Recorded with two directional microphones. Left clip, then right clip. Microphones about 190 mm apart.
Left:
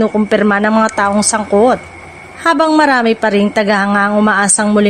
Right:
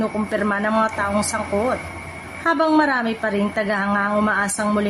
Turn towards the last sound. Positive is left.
turn(degrees=45)  # may be behind; listen again after turning